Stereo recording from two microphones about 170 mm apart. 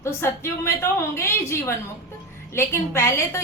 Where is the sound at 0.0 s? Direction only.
15° left (ahead or behind).